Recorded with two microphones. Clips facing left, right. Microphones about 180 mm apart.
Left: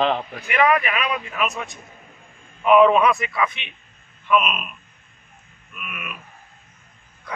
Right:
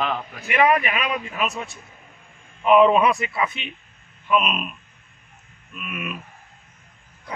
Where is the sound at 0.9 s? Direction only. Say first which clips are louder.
Left 1 dB; 35° right (ahead or behind).